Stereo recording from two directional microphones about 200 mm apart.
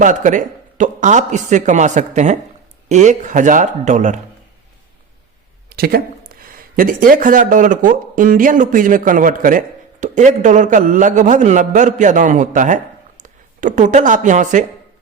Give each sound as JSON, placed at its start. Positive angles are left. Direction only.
{"t": 0.0, "sound": "speech", "side_deg": -40}
{"t": 5.6, "sound": "speech", "side_deg": -50}